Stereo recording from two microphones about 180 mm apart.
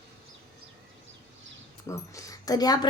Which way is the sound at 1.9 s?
15° left (ahead or behind).